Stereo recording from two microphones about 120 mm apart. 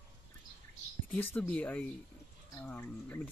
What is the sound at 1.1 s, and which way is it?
Speech, 15° left (ahead or behind).